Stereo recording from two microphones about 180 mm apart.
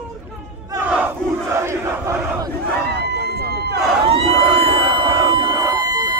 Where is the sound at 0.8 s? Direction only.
5° right (ahead or behind).